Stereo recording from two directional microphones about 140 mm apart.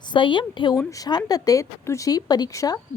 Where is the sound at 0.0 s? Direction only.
35° left (ahead or behind).